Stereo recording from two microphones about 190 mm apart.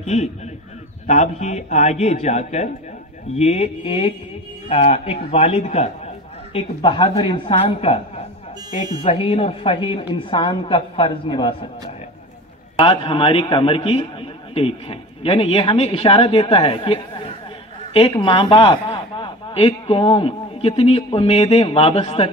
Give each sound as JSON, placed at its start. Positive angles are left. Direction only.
{"t": 0.0, "sound": "a man's voice", "side_deg": 35}
{"t": 8.6, "sound": "speech", "side_deg": -20}
{"t": 9.0, "sound": "a man's voice", "side_deg": 30}
{"t": 12.7, "sound": "a man's voice", "side_deg": 25}